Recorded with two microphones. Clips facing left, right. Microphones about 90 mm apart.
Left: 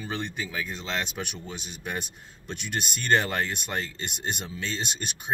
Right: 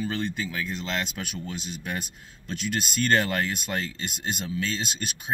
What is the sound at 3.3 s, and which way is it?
Speech, 25° left (ahead or behind).